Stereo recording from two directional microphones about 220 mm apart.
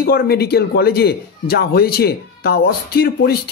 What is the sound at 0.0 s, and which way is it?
Speech, 45° left (ahead or behind).